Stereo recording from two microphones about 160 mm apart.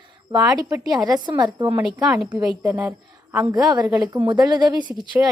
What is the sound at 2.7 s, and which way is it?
Speech, 15° right (ahead or behind).